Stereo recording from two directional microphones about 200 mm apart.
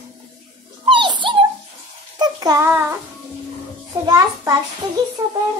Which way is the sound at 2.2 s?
20° right (ahead or behind).